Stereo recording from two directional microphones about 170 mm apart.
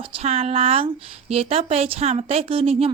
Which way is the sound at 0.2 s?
40° right (ahead or behind).